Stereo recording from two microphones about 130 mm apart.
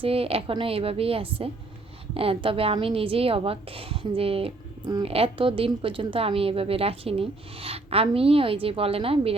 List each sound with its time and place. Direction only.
0.0 s speech: 50° right (ahead or behind)